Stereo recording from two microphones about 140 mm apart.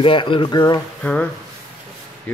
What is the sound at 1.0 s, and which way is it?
Speech, 10° left (ahead or behind).